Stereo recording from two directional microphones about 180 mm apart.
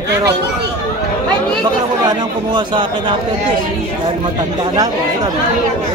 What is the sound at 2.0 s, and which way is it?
A man's voice, 25° right (ahead or behind).